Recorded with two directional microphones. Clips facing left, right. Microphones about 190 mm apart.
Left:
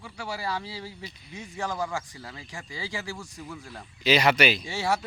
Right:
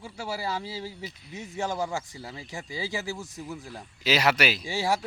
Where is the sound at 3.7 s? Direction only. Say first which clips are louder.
Left 3 dB; 5° right (ahead or behind).